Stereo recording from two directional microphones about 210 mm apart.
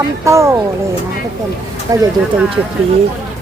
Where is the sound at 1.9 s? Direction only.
15° right (ahead or behind).